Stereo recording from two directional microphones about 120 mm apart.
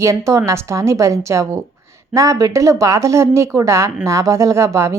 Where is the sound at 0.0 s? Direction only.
25° right (ahead or behind).